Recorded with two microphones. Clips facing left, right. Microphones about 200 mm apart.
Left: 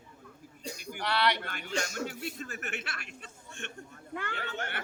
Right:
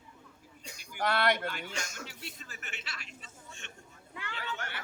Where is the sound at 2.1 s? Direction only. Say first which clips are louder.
Left 9 dB; 50° left (ahead or behind).